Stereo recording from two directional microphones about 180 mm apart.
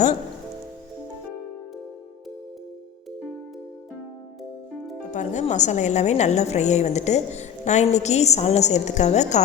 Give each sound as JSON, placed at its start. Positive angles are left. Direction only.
{"t": 5.1, "sound": "a woman's voice", "side_deg": 40}